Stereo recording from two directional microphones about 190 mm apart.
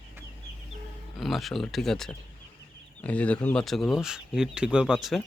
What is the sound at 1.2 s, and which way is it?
Speech, centre (ahead or behind).